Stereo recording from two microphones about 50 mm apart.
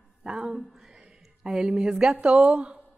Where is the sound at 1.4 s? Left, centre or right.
Centre.